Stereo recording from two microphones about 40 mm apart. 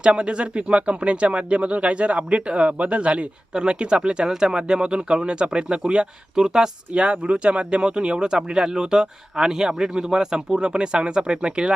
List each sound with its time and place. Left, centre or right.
0.0 s speech: right
6.9 s speech: right